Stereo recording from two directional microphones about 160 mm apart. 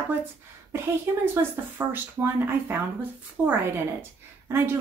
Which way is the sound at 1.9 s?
15° right (ahead or behind).